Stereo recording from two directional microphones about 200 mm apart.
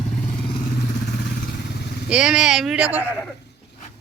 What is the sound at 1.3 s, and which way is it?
Vehicle, 50° left (ahead or behind).